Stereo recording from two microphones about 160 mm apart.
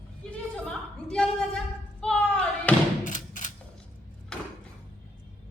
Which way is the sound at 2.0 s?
5° left (ahead or behind).